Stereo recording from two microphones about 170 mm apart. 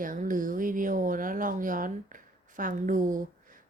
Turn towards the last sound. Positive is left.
turn(degrees=-50)  # may be behind; listen again after turning